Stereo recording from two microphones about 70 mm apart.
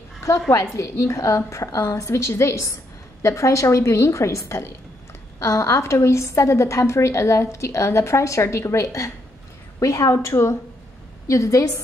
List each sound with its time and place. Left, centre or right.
0.7 s a woman's voice: left